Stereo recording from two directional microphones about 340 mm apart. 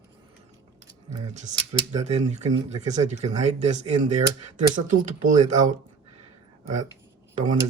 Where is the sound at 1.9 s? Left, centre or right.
Centre.